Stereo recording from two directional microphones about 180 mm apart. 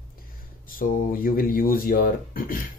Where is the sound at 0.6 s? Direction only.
50° left (ahead or behind).